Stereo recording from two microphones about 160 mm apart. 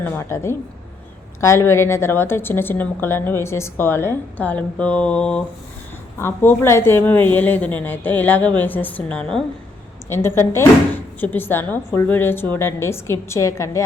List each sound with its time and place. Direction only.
0.0 s a woman's voice: 15° left (ahead or behind)